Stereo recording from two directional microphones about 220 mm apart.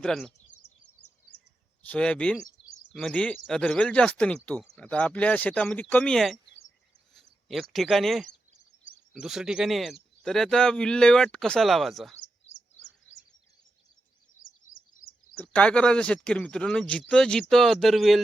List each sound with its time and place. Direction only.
0.0 s a man's voice: centre (ahead or behind)
1.9 s a man's voice: 5° left (ahead or behind)
14.7 s bird vocalization: 65° left (ahead or behind)
15.4 s a man's voice: 5° left (ahead or behind)